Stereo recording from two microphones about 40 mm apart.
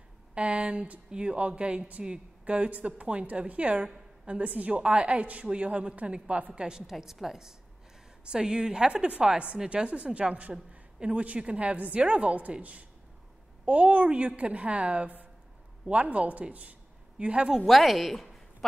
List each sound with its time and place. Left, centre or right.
0.3 s a woman's voice: right
6.6 s a woman's voice: centre; by 12.5 s right
13.7 s a woman's voice: right
17.6 s speech: centre